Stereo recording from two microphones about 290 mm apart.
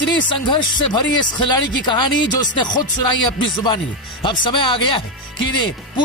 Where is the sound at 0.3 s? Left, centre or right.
Centre.